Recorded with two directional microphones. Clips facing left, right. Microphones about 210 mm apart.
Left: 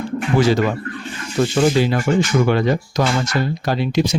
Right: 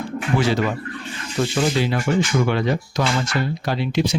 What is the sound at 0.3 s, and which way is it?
Speech, 40° left (ahead or behind).